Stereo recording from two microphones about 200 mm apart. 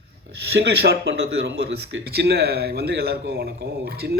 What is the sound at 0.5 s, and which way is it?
Speech, 55° right (ahead or behind).